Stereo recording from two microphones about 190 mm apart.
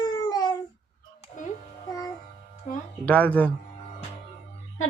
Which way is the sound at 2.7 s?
40° left (ahead or behind).